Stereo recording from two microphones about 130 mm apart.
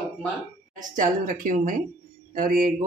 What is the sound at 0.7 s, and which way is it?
A woman's voice, 90° right.